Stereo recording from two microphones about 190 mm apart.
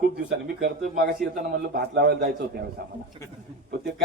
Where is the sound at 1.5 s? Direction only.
55° right (ahead or behind).